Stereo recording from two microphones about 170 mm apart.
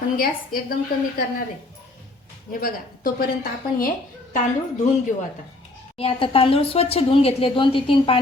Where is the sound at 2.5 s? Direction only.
55° left (ahead or behind).